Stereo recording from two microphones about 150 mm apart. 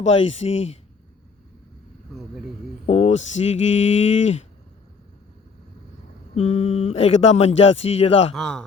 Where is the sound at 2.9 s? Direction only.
45° left (ahead or behind).